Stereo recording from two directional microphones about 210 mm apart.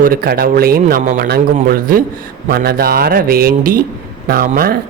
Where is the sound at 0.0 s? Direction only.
45° right (ahead or behind).